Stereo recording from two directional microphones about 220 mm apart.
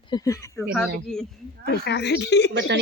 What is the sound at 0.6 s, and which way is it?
Speech, centre (ahead or behind).